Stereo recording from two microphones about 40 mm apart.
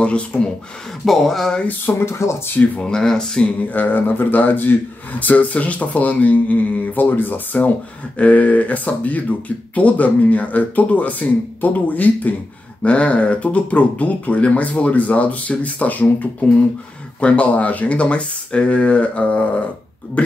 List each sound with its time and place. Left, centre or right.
0.0 s speech: left
1.0 s speech: centre
1.9 s speech: left
2.8 s speech: centre
3.7 s speech: left
5.2 s speech: left
12.8 s speech: left